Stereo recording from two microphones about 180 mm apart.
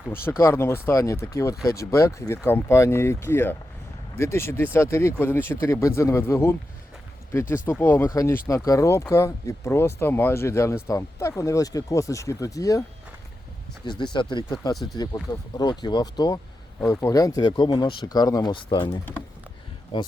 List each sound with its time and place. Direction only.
0.3 s speech: 15° left (ahead or behind)
14.0 s speech: 25° left (ahead or behind)